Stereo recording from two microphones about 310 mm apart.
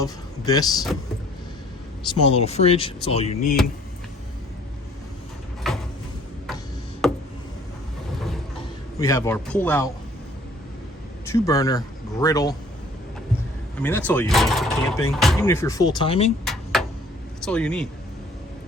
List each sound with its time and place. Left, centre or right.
0.0 s speech: centre
2.2 s speech: centre
5.7 s a sound: centre
7.0 s tick: centre
9.0 s speech: centre
11.3 s speech: centre
13.7 s speech: centre
16.4 s a sound: centre
17.4 s speech: centre